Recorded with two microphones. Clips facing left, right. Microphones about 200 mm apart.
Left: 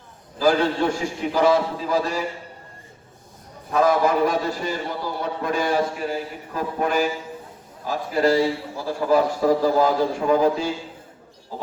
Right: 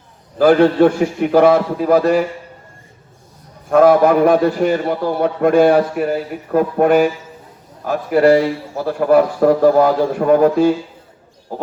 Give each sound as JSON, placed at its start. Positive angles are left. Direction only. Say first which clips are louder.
{"t": 0.3, "sound": "a man's voice", "louder": "right 9 dB", "side_deg": -60}
{"t": 3.7, "sound": "a man's voice", "louder": "right 8 dB", "side_deg": -60}